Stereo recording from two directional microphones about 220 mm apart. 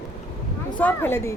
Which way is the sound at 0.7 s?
10° left (ahead or behind).